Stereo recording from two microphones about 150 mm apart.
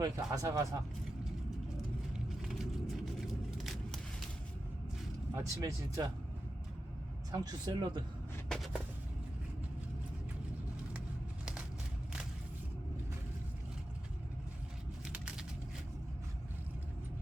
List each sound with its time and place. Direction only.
0.0 s speech: 20° right (ahead or behind)
2.1 s vehicle: centre (ahead or behind)
5.3 s speech: 20° right (ahead or behind)
7.3 s speech: 25° right (ahead or behind)
8.4 s a sound: 5° left (ahead or behind)
15.0 s a sound: 5° right (ahead or behind)